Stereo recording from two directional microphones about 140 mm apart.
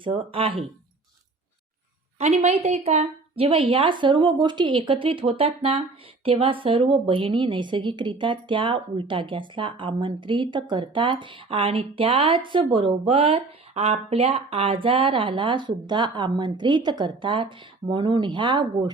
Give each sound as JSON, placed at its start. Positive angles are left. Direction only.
{"t": 0.0, "sound": "speech", "side_deg": -40}
{"t": 2.1, "sound": "a woman's voice", "side_deg": -50}